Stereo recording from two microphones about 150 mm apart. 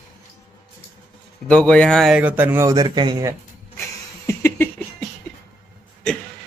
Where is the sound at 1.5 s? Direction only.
5° left (ahead or behind).